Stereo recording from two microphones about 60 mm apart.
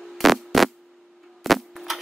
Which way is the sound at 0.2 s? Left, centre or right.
Centre.